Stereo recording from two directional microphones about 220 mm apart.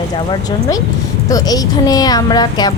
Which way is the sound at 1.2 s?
15° left (ahead or behind).